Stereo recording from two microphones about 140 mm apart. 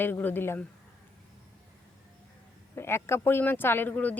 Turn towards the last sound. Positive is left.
turn(degrees=10)  # may be behind; listen again after turning